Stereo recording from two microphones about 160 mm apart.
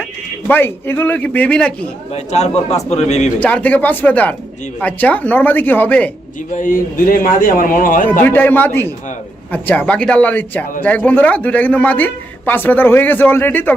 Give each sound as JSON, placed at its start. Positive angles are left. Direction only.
{"t": 0.4, "sound": "a man's voice", "side_deg": 15}
{"t": 2.1, "sound": "a man's voice", "side_deg": 45}
{"t": 3.4, "sound": "a man's voice", "side_deg": 10}
{"t": 6.5, "sound": "a man's voice", "side_deg": 55}
{"t": 8.2, "sound": "a man's voice", "side_deg": 10}